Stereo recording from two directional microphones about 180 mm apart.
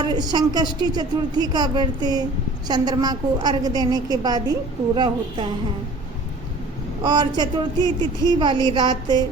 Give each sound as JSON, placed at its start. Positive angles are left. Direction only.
{"t": 0.0, "sound": "a woman's voice", "side_deg": -25}
{"t": 7.0, "sound": "a woman's voice", "side_deg": -25}